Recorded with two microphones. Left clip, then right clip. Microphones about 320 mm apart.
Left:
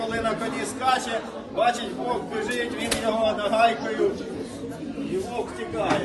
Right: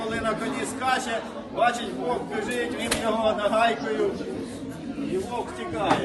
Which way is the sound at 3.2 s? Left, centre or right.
Centre.